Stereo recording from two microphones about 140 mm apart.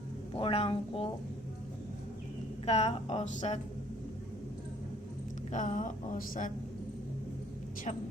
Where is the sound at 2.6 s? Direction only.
50° left (ahead or behind).